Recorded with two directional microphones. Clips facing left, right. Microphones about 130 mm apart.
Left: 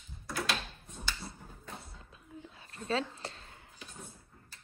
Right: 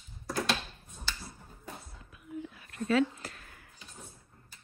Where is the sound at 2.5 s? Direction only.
30° left (ahead or behind).